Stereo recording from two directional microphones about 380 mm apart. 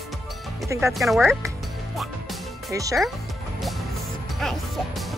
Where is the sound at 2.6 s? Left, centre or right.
Centre.